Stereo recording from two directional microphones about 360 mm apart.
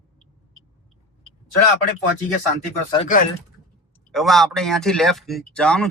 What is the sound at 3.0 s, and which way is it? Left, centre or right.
Speech, left.